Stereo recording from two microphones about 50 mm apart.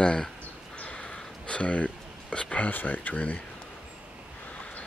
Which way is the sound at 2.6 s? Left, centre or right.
Left.